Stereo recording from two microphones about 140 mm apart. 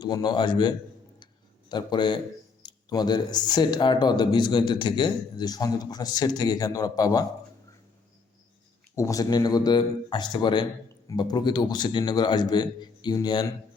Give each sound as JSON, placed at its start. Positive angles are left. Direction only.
{"t": 0.0, "sound": "a man's voice", "side_deg": 30}
{"t": 1.7, "sound": "a man's voice", "side_deg": 30}
{"t": 9.0, "sound": "a man's voice", "side_deg": 25}